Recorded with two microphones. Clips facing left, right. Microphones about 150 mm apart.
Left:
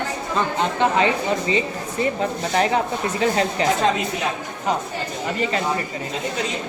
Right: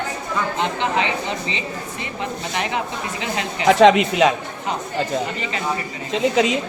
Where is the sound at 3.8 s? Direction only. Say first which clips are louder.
Right 8 dB; 80° right.